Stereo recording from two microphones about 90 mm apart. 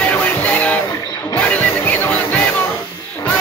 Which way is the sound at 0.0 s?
15° left (ahead or behind).